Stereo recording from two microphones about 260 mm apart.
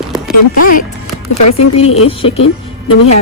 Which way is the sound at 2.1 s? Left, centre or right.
Left.